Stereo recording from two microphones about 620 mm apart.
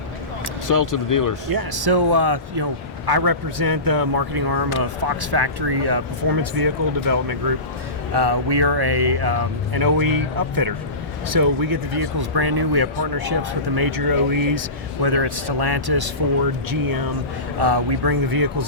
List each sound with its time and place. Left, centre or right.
0.7 s speech: left
1.5 s speech: right